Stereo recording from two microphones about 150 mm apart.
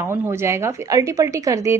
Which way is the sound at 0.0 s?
15° right (ahead or behind).